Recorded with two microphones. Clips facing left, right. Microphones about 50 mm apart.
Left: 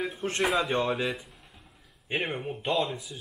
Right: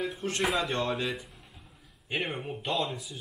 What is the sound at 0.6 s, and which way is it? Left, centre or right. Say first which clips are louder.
Speech: left 3 dB; centre.